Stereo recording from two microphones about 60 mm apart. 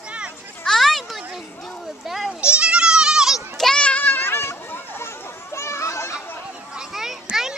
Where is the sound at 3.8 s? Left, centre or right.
Left.